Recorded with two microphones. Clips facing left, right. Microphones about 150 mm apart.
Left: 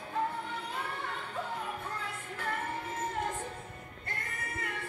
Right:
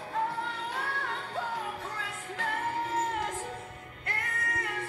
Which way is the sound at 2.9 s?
90° right.